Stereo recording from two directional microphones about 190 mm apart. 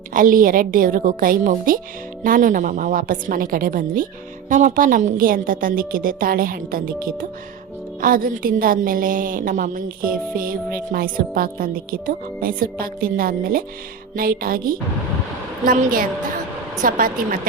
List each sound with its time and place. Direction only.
0.1 s a woman's voice: 45° right (ahead or behind)